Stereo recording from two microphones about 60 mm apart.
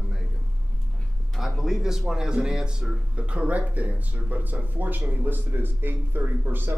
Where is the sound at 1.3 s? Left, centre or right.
Centre; by 6.7 s right.